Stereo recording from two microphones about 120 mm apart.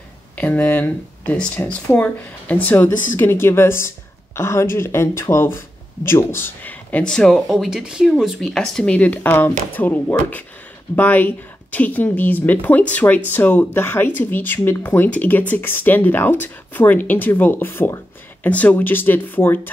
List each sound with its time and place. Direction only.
0.4 s speech: 10° left (ahead or behind)
2.9 s speech: 90° left
3.2 s speech: 20° left (ahead or behind)